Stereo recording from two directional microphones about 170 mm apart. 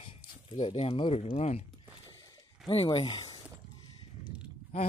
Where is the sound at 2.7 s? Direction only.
35° left (ahead or behind).